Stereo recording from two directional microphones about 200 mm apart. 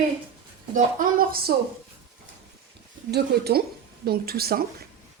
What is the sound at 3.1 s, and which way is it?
A woman's voice, 55° right (ahead or behind).